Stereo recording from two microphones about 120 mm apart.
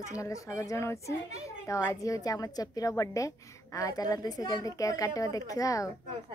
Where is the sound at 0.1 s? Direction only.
25° left (ahead or behind).